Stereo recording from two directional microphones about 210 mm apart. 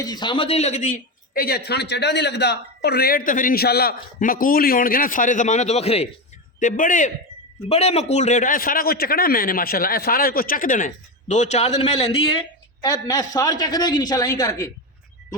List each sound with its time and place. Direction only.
0.0 s a man's voice: 20° left (ahead or behind)
1.3 s a man's voice: 45° left (ahead or behind); by 14.7 s 20° left (ahead or behind)